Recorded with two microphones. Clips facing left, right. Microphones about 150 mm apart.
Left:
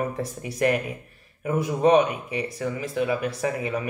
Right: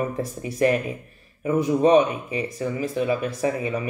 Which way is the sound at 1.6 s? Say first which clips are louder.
Right 2 dB; 35° right (ahead or behind).